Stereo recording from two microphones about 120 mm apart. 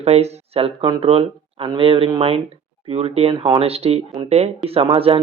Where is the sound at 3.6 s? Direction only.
55° right (ahead or behind).